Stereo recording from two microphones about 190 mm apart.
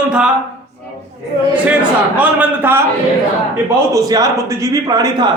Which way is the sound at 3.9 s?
20° right (ahead or behind).